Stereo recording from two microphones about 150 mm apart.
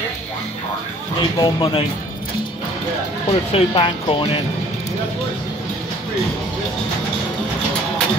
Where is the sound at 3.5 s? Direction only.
35° left (ahead or behind).